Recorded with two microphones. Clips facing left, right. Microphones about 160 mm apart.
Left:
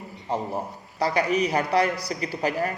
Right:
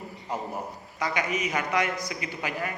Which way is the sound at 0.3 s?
30° left (ahead or behind).